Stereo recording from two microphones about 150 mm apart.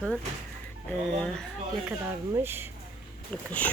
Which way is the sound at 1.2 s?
5° left (ahead or behind).